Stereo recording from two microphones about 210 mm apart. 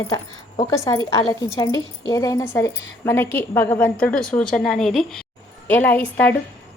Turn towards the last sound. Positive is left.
turn(degrees=10)  # may be behind; listen again after turning